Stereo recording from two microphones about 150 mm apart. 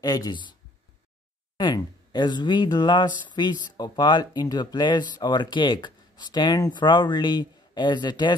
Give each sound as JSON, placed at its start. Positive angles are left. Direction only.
{"t": 0.0, "sound": "speech", "side_deg": 25}
{"t": 1.6, "sound": "speech", "side_deg": 30}